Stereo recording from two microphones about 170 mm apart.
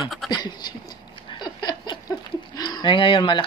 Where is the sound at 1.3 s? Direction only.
25° left (ahead or behind).